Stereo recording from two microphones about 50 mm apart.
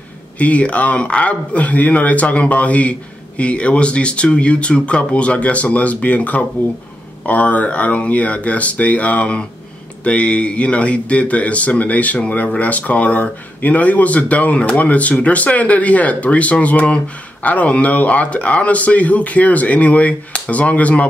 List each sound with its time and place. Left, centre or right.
0.4 s speech: left